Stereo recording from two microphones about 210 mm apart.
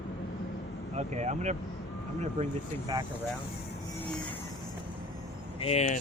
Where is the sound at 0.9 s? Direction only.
35° right (ahead or behind).